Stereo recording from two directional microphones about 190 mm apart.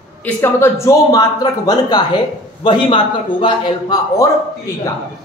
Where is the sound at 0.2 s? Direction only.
15° left (ahead or behind).